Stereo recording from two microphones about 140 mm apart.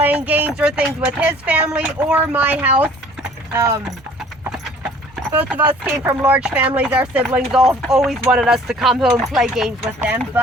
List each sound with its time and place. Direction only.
0.0 s a sound: 10° right (ahead or behind)
1.2 s speech: 10° right (ahead or behind)
3.5 s speech: 20° right (ahead or behind)
5.3 s speech: 15° right (ahead or behind)